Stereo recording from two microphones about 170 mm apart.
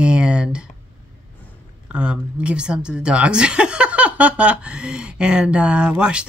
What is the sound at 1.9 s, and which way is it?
A woman's voice, 5° right (ahead or behind).